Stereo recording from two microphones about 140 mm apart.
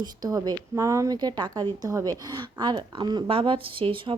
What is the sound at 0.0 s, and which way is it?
A woman's voice, 25° right (ahead or behind).